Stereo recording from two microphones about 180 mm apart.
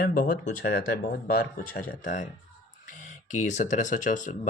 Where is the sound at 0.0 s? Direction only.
50° left (ahead or behind).